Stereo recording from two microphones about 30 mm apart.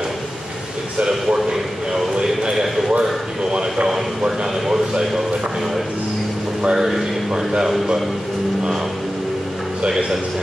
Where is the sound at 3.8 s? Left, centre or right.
Centre.